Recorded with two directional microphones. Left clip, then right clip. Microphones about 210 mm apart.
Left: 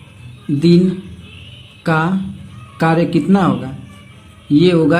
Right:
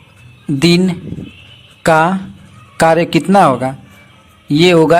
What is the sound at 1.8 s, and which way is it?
Speech, 35° right (ahead or behind).